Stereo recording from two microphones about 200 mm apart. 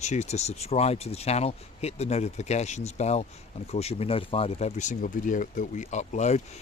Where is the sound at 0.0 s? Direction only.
35° left (ahead or behind).